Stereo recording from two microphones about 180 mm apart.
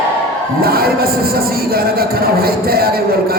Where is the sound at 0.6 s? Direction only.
55° right (ahead or behind).